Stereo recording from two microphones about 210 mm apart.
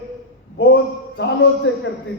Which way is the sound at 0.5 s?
55° left (ahead or behind).